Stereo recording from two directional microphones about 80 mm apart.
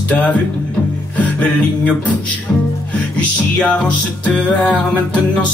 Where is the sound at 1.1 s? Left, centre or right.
Centre.